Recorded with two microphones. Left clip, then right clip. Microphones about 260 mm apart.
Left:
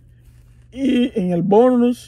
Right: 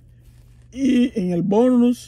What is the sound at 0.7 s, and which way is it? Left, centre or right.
Speech, centre.